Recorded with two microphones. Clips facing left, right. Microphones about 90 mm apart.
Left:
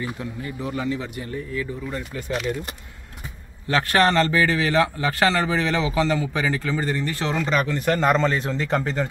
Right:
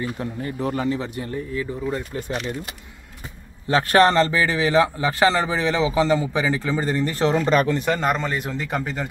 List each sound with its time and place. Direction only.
0.2 s speech: 40° right (ahead or behind); by 2.3 s 25° right (ahead or behind)
3.6 s speech: 25° right (ahead or behind)
7.1 s speech: 35° right (ahead or behind)
7.7 s speech: 15° right (ahead or behind)